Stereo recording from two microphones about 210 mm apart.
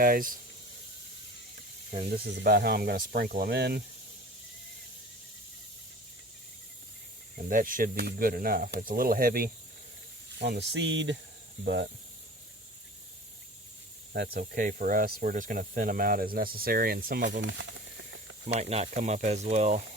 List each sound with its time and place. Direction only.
0.0 s speech: 40° right (ahead or behind)
2.0 s speech: 50° right (ahead or behind)
7.3 s speech: 40° right (ahead or behind)
14.1 s speech: 45° right (ahead or behind)
17.4 s a sound: 65° right (ahead or behind)
18.7 s speech: 30° right (ahead or behind)